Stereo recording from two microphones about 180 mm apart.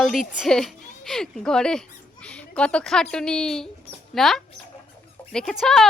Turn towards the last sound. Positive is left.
turn(degrees=0)  # may be behind; listen again after turning